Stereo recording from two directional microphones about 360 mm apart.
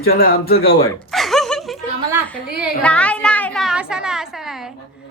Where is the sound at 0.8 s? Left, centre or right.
Centre.